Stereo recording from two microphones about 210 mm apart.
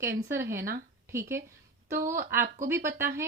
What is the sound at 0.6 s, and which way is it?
Speech, 45° right (ahead or behind).